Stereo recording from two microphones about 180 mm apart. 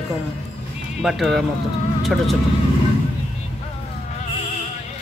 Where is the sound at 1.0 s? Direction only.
Centre (ahead or behind).